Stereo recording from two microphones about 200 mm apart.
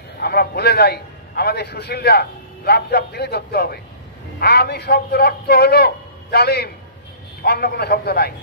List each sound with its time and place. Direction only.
0.2 s a man's voice: 50° left (ahead or behind)